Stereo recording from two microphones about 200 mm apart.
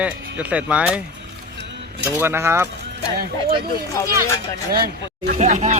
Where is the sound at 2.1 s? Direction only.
10° right (ahead or behind).